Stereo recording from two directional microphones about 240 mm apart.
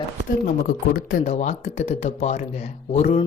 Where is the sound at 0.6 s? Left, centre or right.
Left.